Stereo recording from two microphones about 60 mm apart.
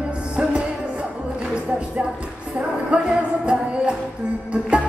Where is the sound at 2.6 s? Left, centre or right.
Centre.